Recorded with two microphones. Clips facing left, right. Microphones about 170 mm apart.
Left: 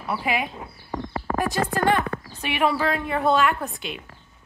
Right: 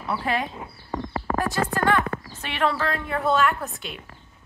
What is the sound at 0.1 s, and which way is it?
Speech, 10° left (ahead or behind).